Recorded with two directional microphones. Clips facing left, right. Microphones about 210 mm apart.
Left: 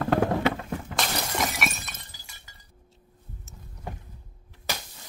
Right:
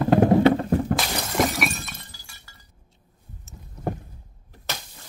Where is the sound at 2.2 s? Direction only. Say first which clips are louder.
Right 1 dB; 20° left (ahead or behind).